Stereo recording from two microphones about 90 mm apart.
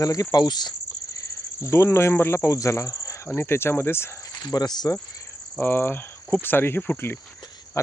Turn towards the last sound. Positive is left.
turn(degrees=20)  # may be behind; listen again after turning